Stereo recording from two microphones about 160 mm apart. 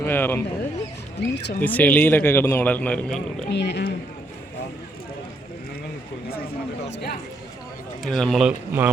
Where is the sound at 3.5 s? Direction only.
90° left.